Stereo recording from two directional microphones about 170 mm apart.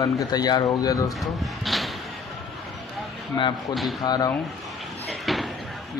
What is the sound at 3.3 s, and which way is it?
Speech, 25° left (ahead or behind).